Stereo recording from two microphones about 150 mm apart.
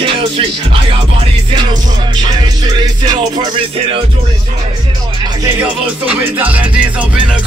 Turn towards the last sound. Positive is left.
turn(degrees=-10)  # may be behind; listen again after turning